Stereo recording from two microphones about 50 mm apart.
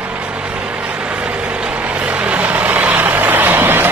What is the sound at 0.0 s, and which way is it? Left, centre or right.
Vehicle, right.